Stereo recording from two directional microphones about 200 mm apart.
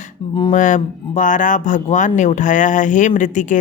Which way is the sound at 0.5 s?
40° left (ahead or behind).